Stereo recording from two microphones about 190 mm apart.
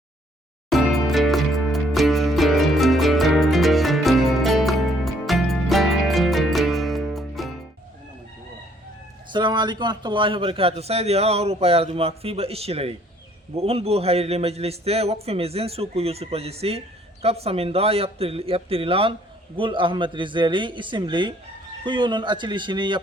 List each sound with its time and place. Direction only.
0.7 s music: centre (ahead or behind)
9.3 s a man's voice: 25° right (ahead or behind)